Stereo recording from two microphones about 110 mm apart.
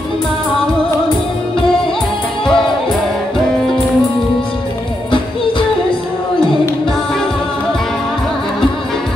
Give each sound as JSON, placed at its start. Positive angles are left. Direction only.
{"t": 2.4, "sound": "music", "side_deg": 5}